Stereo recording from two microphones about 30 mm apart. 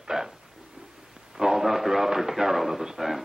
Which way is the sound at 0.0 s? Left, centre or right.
Centre.